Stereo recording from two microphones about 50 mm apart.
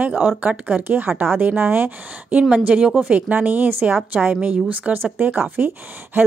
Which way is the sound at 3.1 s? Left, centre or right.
Right.